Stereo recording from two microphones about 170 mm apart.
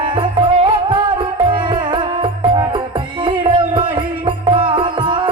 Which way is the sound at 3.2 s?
30° right (ahead or behind).